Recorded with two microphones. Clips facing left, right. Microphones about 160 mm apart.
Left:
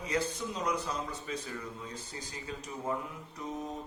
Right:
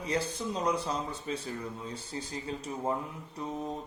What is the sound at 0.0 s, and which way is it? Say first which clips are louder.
Speech: right 1 dB; 30° right (ahead or behind).